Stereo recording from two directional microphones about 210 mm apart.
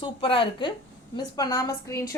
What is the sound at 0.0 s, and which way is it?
A woman's voice, 25° left (ahead or behind).